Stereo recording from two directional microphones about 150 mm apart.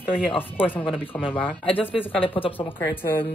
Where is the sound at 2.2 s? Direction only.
35° left (ahead or behind).